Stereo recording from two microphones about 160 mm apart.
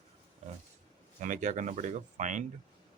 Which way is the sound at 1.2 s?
50° right (ahead or behind).